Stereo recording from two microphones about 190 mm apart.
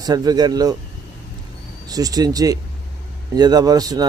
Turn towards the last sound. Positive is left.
turn(degrees=-20)  # may be behind; listen again after turning